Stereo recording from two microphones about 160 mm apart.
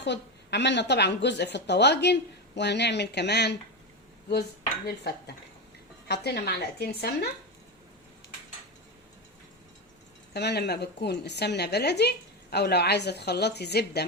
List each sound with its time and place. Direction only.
0.0 s a woman's voice: 90° left
6.1 s a woman's voice: 90° left
10.3 s a woman's voice: 90° left